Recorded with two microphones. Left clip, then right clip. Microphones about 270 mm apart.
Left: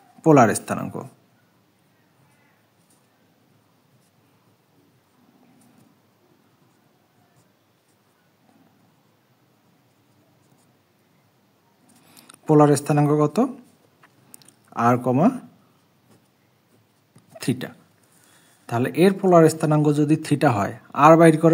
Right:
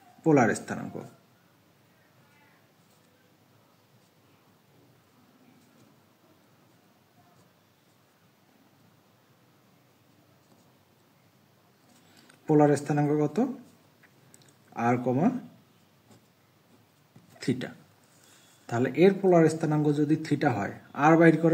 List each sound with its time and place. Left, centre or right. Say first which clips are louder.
0.2 s a man's voice: left 8 dB; left
12.1 s speech: left 6 dB; left
14.4 s a sound: left 8 dB; left
17.4 s a man's voice: left 4 dB; left